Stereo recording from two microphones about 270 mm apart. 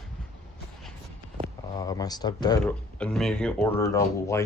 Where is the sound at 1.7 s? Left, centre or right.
Centre.